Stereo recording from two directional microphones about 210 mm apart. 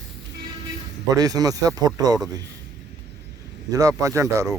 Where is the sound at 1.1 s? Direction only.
15° right (ahead or behind).